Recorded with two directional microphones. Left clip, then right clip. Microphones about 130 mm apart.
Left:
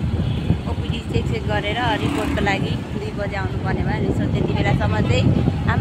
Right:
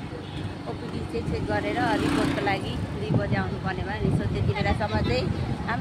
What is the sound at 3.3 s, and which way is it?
Speech, 10° left (ahead or behind).